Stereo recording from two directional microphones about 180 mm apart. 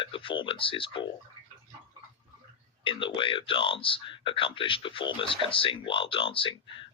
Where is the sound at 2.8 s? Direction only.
25° left (ahead or behind).